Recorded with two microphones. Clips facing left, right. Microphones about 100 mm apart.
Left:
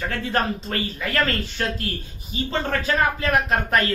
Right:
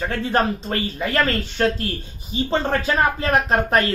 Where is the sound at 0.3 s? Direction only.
25° right (ahead or behind).